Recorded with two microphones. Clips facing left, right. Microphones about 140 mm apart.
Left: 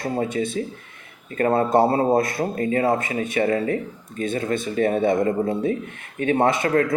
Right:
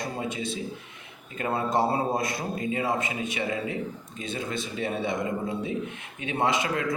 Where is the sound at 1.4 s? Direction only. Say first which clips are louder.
Left 8 dB; 50° left (ahead or behind).